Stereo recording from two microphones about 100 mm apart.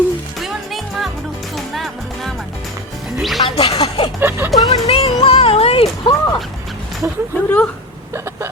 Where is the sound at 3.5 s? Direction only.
80° left.